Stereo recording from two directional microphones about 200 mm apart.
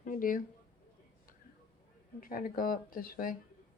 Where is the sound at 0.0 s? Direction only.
45° left (ahead or behind).